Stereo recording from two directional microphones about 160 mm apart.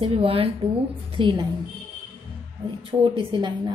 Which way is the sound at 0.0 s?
35° right (ahead or behind).